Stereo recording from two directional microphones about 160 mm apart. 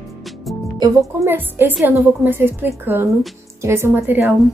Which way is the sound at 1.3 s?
10° right (ahead or behind).